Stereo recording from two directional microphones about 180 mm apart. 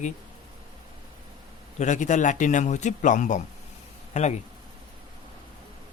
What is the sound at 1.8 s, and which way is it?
A man's voice, 45° left (ahead or behind).